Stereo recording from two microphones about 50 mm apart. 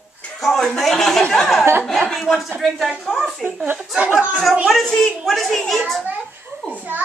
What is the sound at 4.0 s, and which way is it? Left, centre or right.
Speech, right.